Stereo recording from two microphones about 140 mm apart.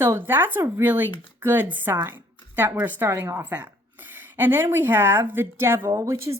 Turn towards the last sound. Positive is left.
turn(degrees=-20)  # may be behind; listen again after turning